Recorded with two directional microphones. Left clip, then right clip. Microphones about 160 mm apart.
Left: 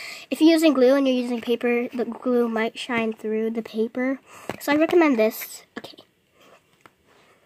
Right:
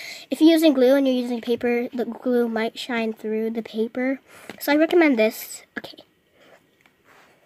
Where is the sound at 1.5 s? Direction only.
10° right (ahead or behind).